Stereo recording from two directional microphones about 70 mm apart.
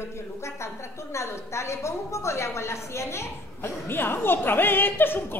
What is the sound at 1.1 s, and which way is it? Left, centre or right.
A woman's voice, left.